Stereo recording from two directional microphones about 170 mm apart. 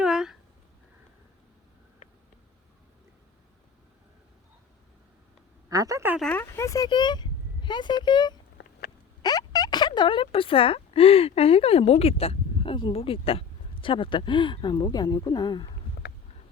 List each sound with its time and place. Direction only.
0.0 s a sound: 5° right (ahead or behind)
5.6 s a woman's voice: 20° right (ahead or behind)
6.1 s speech: 5° left (ahead or behind); by 15.7 s 25° left (ahead or behind)